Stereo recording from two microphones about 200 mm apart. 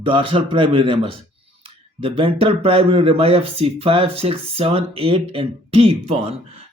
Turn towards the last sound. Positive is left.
turn(degrees=-30)  # may be behind; listen again after turning